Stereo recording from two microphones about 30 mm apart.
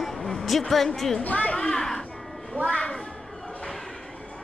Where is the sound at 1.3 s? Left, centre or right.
Left.